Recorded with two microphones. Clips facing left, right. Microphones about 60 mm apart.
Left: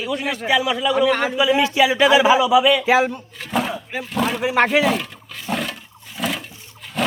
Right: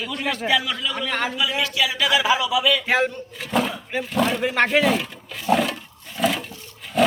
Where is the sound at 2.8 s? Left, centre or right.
Centre.